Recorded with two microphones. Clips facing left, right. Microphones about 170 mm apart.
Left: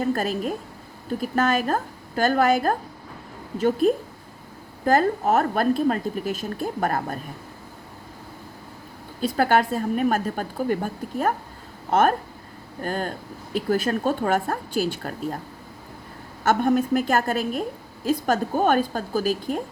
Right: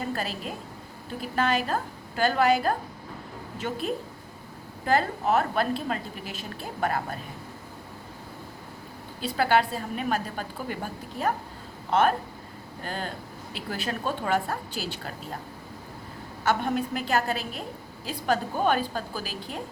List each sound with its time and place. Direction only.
0.0 s a woman's voice: 45° left (ahead or behind)
4.9 s a woman's voice: 45° left (ahead or behind)
9.2 s a woman's voice: 45° left (ahead or behind)
16.4 s a woman's voice: 45° left (ahead or behind)